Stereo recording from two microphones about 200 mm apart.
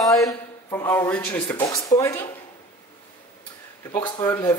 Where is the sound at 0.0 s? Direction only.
Centre (ahead or behind).